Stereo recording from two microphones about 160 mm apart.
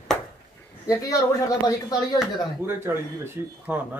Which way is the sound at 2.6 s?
15° right (ahead or behind).